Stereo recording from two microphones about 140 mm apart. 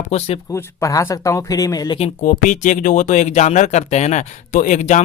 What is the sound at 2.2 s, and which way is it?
Speech, 65° left (ahead or behind).